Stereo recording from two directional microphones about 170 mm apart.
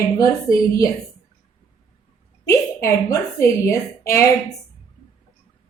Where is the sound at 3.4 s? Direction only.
15° left (ahead or behind).